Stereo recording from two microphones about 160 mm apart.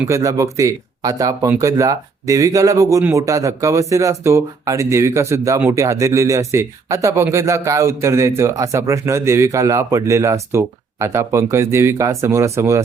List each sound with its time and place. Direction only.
0.0 s speech: 20° right (ahead or behind)